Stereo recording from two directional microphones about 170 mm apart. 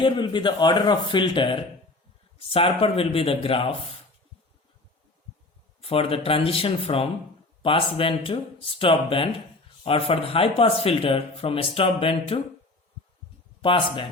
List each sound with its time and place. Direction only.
0.0 s speech: 30° left (ahead or behind)
5.8 s speech: 35° left (ahead or behind)
13.6 s speech: 30° left (ahead or behind)